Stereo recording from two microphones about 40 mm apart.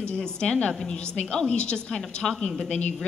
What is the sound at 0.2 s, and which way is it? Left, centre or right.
A woman's voice, left.